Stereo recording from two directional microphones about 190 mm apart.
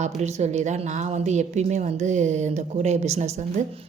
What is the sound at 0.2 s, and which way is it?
Speech, 35° right (ahead or behind).